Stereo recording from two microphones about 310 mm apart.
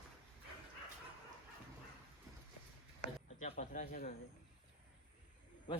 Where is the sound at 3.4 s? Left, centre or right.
Left.